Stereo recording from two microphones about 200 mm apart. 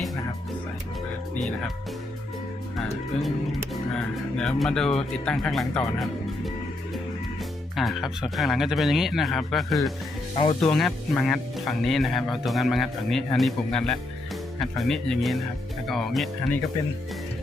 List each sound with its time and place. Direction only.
4.4 s speech: 5° left (ahead or behind)
7.8 s speech: centre (ahead or behind)
10.3 s speech: 30° left (ahead or behind)
10.6 s speech: centre (ahead or behind)